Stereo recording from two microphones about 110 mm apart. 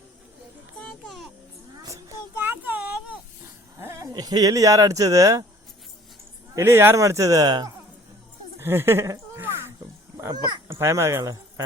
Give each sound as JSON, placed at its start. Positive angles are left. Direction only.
{"t": 0.8, "sound": "music", "side_deg": 5}
{"t": 1.7, "sound": "music", "side_deg": -35}
{"t": 2.3, "sound": "a sound", "side_deg": -15}
{"t": 4.1, "sound": "speech", "side_deg": -40}
{"t": 6.6, "sound": "speech", "side_deg": -25}
{"t": 8.5, "sound": "a sound", "side_deg": -20}
{"t": 10.3, "sound": "speech", "side_deg": -40}
{"t": 10.7, "sound": "speech", "side_deg": -25}